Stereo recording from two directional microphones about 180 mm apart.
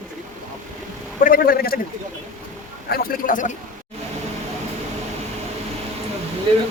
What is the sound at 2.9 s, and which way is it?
Speech, 55° left (ahead or behind).